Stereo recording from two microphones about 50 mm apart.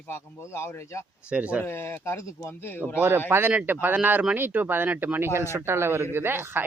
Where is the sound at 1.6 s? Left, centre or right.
Left.